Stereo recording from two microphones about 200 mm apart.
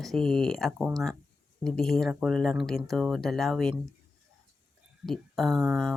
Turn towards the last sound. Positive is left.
turn(degrees=0)  # may be behind; listen again after turning